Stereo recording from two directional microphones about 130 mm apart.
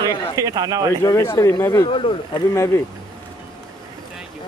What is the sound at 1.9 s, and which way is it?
Speech, 45° left (ahead or behind).